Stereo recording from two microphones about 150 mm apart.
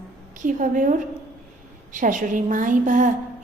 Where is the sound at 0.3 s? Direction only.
60° right (ahead or behind).